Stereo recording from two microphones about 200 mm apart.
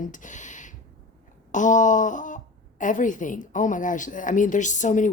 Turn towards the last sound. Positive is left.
turn(degrees=40)  # may be behind; listen again after turning